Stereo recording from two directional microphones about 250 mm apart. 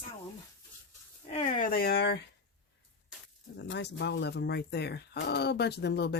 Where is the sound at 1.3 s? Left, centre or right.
Left.